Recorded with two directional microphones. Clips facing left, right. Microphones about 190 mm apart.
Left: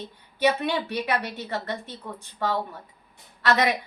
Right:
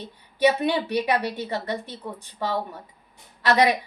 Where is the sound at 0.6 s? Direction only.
15° right (ahead or behind).